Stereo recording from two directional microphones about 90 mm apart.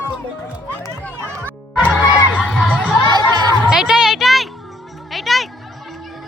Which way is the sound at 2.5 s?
5° right (ahead or behind).